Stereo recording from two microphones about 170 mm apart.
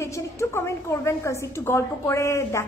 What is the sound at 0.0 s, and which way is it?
A woman's voice, 15° left (ahead or behind).